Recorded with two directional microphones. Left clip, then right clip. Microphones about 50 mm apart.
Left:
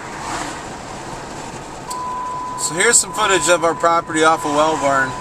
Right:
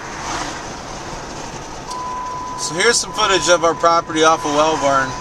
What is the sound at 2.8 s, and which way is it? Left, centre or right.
Speech, centre.